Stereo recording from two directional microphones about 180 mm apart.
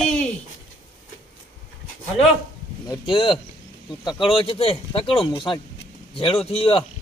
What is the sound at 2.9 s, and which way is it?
Speech, 30° left (ahead or behind).